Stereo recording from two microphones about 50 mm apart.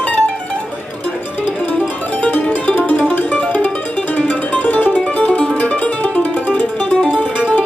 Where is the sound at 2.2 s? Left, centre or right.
Left.